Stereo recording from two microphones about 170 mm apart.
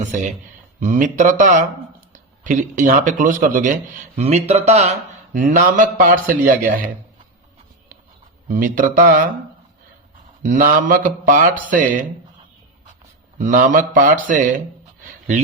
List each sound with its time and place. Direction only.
0.8 s speech: 50° right (ahead or behind)
8.4 s speech: 55° right (ahead or behind)
10.4 s speech: 50° right (ahead or behind)
13.4 s speech: 50° right (ahead or behind)